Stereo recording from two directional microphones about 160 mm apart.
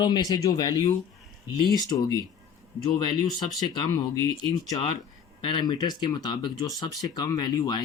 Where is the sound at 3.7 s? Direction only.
25° left (ahead or behind).